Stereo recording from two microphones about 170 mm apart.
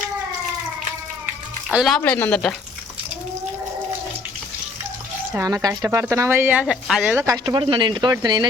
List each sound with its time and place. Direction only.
1.7 s speech: centre (ahead or behind)
2.0 s a woman's voice: 10° left (ahead or behind)
5.4 s speech: 20° right (ahead or behind); by 7.2 s 5° right (ahead or behind)
7.2 s speech: 20° right (ahead or behind)